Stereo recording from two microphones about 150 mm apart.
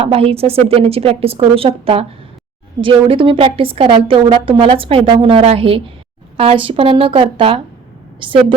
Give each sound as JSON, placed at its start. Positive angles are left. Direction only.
{"t": 0.0, "sound": "a woman's voice", "side_deg": -40}